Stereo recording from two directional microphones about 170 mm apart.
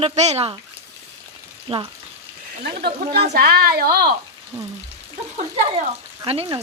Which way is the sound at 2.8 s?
65° right (ahead or behind).